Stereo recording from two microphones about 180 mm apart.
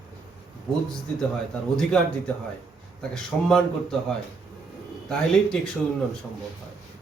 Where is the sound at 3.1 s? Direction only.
5° left (ahead or behind).